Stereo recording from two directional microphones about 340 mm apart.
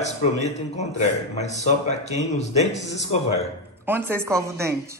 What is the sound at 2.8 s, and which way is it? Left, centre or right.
Speech, left.